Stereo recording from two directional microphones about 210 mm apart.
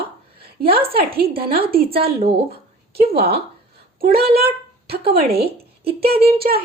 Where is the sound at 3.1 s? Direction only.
50° right (ahead or behind).